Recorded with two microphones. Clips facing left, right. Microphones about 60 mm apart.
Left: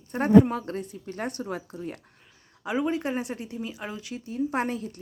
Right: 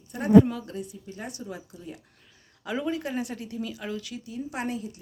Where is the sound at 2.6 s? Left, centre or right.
Left.